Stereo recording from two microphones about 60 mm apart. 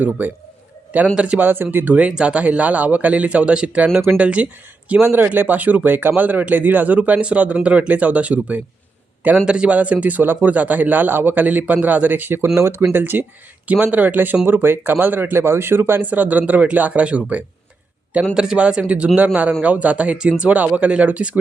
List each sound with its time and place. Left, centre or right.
0.0 s speech: right
1.5 s speech: right
2.0 s speech: centre
5.0 s speech: right
12.5 s speech: right